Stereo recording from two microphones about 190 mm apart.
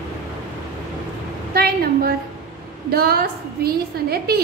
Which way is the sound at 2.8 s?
55° right (ahead or behind).